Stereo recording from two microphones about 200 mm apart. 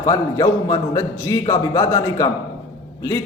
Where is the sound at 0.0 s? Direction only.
15° left (ahead or behind).